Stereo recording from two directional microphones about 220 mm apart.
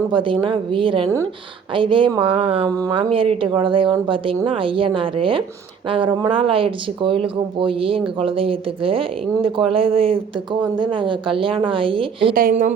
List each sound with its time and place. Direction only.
0.1 s a woman's voice: 20° right (ahead or behind)
12.3 s speech: 40° right (ahead or behind)